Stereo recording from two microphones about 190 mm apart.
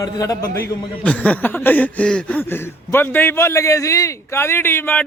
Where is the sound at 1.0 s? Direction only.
5° left (ahead or behind).